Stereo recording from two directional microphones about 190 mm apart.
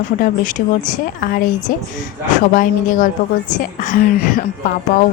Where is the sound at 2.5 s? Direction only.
45° left (ahead or behind).